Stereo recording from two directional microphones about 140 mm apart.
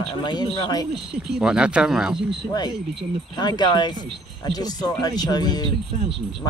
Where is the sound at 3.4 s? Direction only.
30° left (ahead or behind).